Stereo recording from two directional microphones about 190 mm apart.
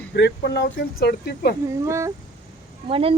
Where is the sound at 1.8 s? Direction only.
15° right (ahead or behind).